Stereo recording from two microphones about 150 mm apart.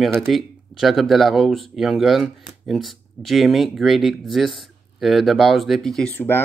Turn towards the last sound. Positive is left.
turn(degrees=15)  # may be behind; listen again after turning